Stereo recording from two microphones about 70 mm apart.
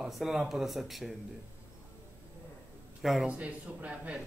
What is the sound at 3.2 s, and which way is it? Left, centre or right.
Speech, right.